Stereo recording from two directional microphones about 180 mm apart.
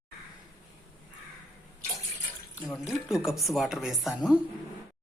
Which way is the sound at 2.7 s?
Centre (ahead or behind).